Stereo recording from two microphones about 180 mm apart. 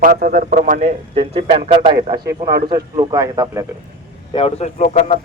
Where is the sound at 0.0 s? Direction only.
50° right (ahead or behind); by 3.7 s 20° right (ahead or behind).